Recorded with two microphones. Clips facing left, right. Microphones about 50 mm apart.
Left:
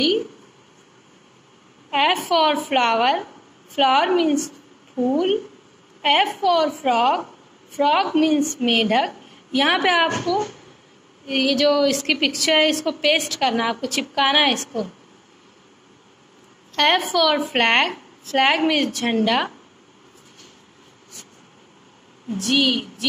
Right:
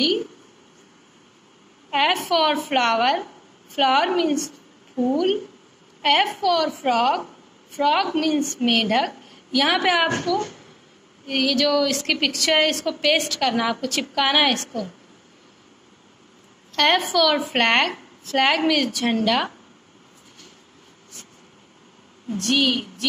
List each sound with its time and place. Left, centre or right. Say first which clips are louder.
1.9 s a woman's voice: left 1 dB; centre
6.4 s a woman's voice: left 2 dB; centre
9.5 s a woman's voice: left 1 dB; left
9.8 s a woman's voice: left 1 dB; centre
16.7 s a woman's voice: left 1 dB; centre
22.3 s a woman's voice: left 1 dB; centre